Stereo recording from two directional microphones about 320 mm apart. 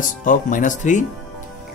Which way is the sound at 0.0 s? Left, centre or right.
Left.